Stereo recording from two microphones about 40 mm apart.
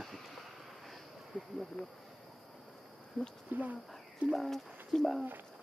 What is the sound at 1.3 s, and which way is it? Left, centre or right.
Speech, right.